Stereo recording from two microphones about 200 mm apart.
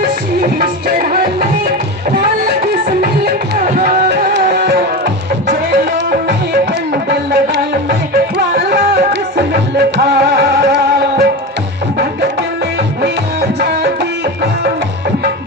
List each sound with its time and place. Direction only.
0.4 s music: 45° right (ahead or behind)
3.0 s music: 50° right (ahead or behind)
4.4 s tabla: 50° right (ahead or behind)
5.5 s music: 50° right (ahead or behind)
13.0 s music: 50° right (ahead or behind)